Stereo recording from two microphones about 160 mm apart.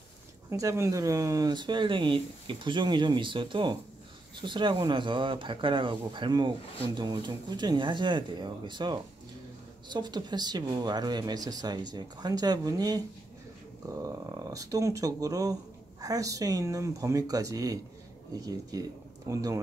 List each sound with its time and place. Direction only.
0.5 s speech: 20° right (ahead or behind)